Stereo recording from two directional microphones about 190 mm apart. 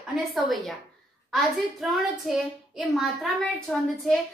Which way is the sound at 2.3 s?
Centre (ahead or behind).